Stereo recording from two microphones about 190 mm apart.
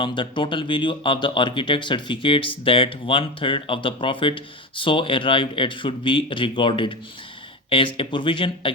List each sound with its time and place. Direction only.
0.0 s speech: 25° left (ahead or behind)